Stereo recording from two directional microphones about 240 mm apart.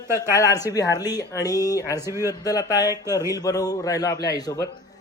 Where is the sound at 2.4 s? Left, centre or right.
Centre.